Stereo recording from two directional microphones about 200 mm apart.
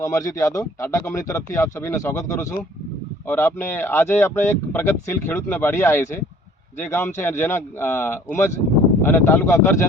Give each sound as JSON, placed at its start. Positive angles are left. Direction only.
{"t": 0.0, "sound": "speech", "side_deg": 15}